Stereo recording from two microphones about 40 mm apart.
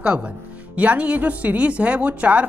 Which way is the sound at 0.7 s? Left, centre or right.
Right.